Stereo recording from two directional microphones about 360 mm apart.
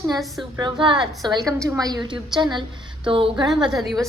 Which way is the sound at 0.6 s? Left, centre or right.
Centre.